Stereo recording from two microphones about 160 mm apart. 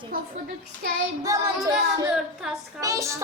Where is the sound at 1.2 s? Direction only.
20° right (ahead or behind).